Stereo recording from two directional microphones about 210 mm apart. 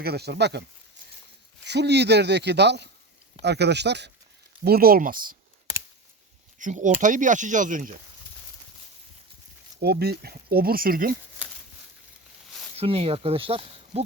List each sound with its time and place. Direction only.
0.0 s speech: 50° right (ahead or behind)
1.6 s speech: 55° right (ahead or behind)
6.6 s speech: 35° right (ahead or behind)
9.8 s speech: 50° right (ahead or behind)
12.7 s speech: 30° right (ahead or behind)